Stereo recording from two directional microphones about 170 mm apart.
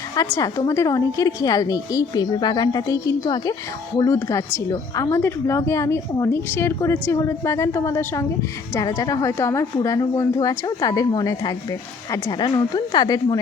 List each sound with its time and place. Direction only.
0.2 s a woman's voice: 20° left (ahead or behind)